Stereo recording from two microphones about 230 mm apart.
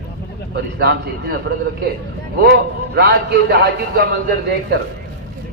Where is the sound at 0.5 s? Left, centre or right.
Right.